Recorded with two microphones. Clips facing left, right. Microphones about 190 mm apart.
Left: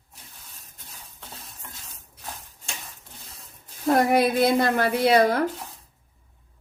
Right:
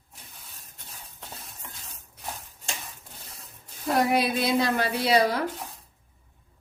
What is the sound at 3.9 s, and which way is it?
A woman's voice, 50° left (ahead or behind).